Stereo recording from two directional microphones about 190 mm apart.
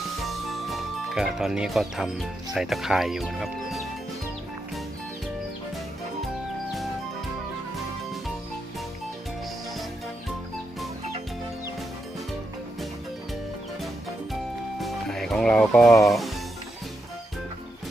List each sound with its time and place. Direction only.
0.0 s speech: centre (ahead or behind)
14.8 s music: centre (ahead or behind)
16.0 s speech: centre (ahead or behind)